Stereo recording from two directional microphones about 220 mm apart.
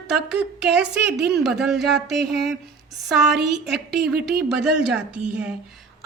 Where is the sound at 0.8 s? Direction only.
50° right (ahead or behind).